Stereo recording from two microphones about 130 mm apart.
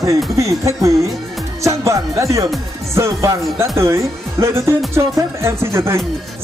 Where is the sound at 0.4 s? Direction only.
25° right (ahead or behind).